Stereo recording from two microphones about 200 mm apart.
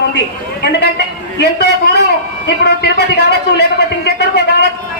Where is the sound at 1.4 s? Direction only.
60° left (ahead or behind).